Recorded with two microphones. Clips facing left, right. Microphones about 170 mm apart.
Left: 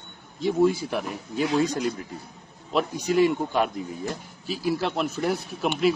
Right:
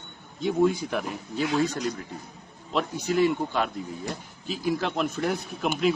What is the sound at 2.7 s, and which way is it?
A man's voice, 10° left (ahead or behind).